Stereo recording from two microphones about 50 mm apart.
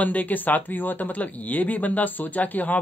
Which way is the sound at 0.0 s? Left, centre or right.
Left.